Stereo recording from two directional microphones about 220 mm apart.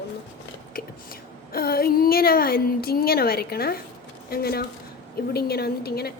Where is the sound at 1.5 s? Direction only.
45° left (ahead or behind).